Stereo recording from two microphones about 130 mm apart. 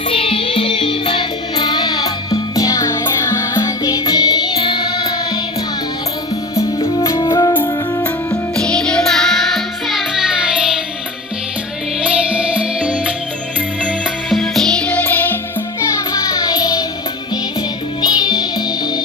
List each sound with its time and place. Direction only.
0.2 s music: 45° left (ahead or behind)
7.2 s music: 35° left (ahead or behind)
8.5 s music: 5° left (ahead or behind)
11.9 s music: 10° right (ahead or behind)
14.3 s music: centre (ahead or behind)
16.0 s music: 30° left (ahead or behind)
18.0 s music: 30° left (ahead or behind)